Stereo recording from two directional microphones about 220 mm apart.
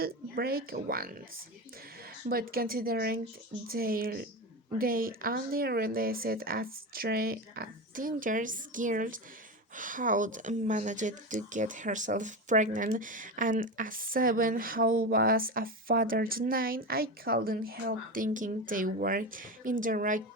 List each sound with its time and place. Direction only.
0.0 s speech: 45° right (ahead or behind)
2.3 s speech: 40° right (ahead or behind)